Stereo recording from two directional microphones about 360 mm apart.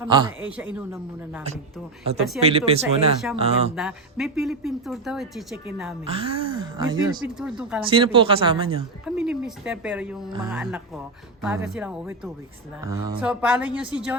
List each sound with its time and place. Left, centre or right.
0.0 s speech: centre
2.4 s speech: centre
3.8 s speech: centre
6.1 s speech: centre
7.9 s speech: centre
9.0 s speech: centre